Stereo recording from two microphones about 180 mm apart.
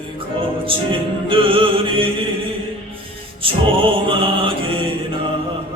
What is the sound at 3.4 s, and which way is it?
Music, 30° right (ahead or behind).